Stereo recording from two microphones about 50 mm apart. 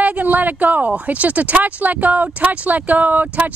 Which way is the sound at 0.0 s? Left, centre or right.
Right.